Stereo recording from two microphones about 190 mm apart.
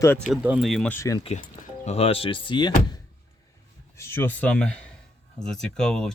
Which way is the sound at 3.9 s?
15° left (ahead or behind).